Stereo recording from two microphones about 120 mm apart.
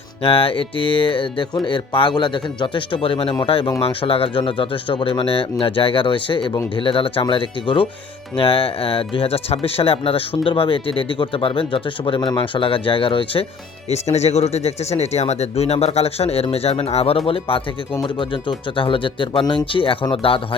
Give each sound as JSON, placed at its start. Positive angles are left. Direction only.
{"t": 0.2, "sound": "speech", "side_deg": 50}
{"t": 13.9, "sound": "speech", "side_deg": 65}